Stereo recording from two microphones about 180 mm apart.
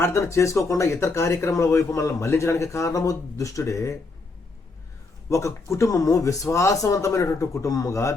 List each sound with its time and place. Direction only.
0.0 s speech: 15° left (ahead or behind)
5.3 s speech: 15° left (ahead or behind)